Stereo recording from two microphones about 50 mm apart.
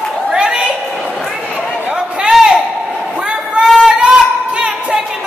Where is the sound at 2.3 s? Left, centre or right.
Centre.